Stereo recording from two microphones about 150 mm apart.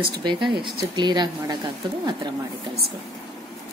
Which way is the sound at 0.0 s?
30° right (ahead or behind).